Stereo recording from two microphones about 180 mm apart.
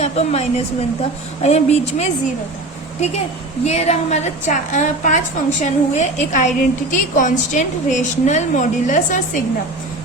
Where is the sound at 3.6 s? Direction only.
40° left (ahead or behind).